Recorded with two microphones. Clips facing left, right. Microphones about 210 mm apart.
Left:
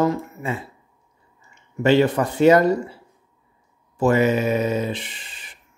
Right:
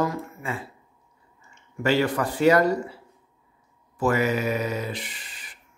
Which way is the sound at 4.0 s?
25° left (ahead or behind).